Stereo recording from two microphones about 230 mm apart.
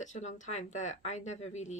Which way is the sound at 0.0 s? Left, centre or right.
Left.